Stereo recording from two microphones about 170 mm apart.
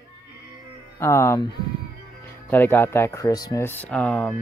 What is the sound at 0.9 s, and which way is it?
Speech, 15° left (ahead or behind).